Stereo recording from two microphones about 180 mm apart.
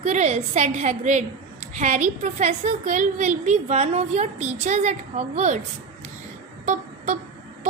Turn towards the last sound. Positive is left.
turn(degrees=-40)  # may be behind; listen again after turning